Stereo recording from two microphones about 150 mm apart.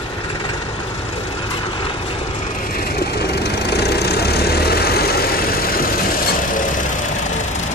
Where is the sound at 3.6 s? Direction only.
90° left.